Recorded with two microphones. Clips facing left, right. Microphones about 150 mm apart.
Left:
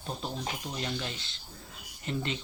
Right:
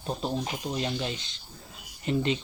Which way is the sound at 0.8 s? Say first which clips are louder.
Right 5 dB; 20° right (ahead or behind).